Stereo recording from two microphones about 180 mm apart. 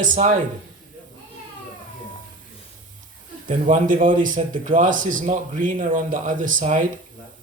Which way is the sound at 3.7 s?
45° right (ahead or behind).